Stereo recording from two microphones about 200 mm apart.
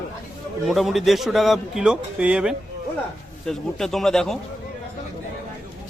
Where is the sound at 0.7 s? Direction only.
Centre (ahead or behind).